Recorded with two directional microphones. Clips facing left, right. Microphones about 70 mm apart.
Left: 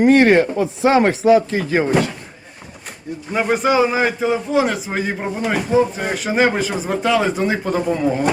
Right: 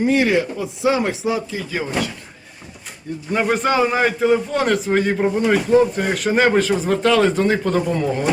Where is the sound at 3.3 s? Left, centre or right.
Centre.